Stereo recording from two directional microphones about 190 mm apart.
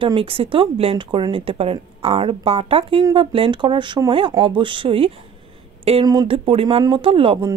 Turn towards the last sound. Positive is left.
turn(degrees=-30)  # may be behind; listen again after turning